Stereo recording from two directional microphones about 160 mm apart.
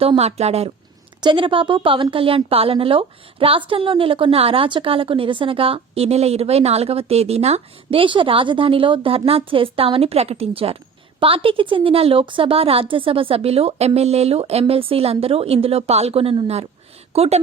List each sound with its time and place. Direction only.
0.0 s a woman's voice: 40° right (ahead or behind)
1.2 s a woman's voice: 30° right (ahead or behind)